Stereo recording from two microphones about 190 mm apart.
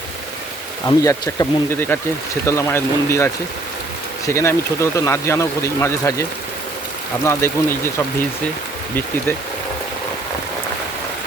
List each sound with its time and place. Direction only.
0.9 s speech: 15° left (ahead or behind)
4.3 s speech: 15° left (ahead or behind)
7.3 s speech: 15° left (ahead or behind)